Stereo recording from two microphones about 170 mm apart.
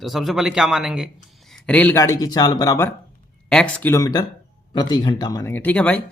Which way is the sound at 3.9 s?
20° left (ahead or behind).